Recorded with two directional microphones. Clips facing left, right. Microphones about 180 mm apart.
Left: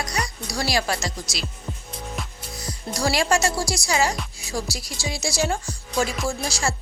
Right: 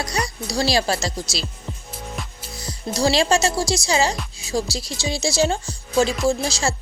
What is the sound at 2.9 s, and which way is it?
Speech, 25° right (ahead or behind).